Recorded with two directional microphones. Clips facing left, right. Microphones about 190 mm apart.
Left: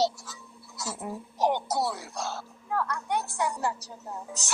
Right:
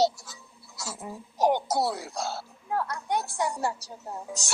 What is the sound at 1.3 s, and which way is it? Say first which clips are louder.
Speech: right 3 dB; 10° right (ahead or behind).